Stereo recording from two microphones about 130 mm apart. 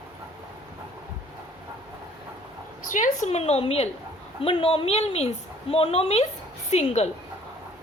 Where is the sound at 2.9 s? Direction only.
75° left (ahead or behind); by 7.1 s 55° left (ahead or behind).